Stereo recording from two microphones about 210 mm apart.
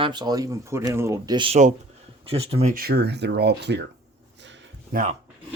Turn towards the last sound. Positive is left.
turn(degrees=-40)  # may be behind; listen again after turning